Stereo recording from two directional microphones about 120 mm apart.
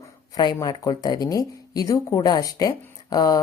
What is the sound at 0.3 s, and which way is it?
Speech, 35° left (ahead or behind).